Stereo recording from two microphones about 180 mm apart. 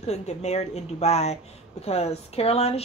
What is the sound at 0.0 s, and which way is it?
Speech, 35° left (ahead or behind).